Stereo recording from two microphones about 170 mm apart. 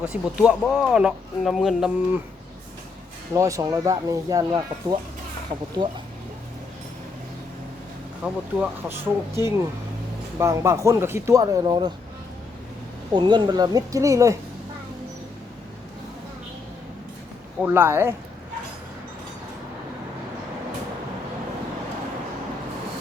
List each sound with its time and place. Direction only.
0.0 s speech: 5° right (ahead or behind)
3.3 s speech: 20° right (ahead or behind)
8.2 s speech: 5° right (ahead or behind); by 11.9 s 25° right (ahead or behind)
13.1 s speech: 25° right (ahead or behind)
17.6 s speech: 15° right (ahead or behind)